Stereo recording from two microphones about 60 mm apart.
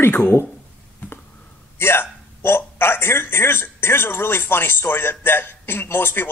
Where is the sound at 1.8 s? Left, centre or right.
Left.